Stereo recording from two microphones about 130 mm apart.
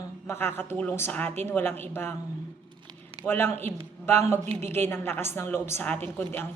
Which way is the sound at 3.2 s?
15° left (ahead or behind).